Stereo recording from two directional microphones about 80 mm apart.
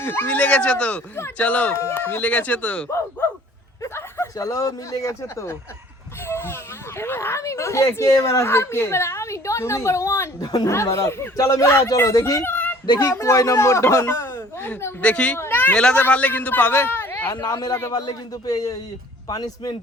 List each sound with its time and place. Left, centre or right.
0.0 s speech: left
1.7 s speech: left
3.8 s a sound: left
4.4 s speech: left
10.4 s speech: left
10.7 s speech: left
12.4 s a sound: left
13.0 s speech: left
15.0 s speech: centre
15.4 s a sound: left
15.7 s a man's voice: centre
17.4 s speech: left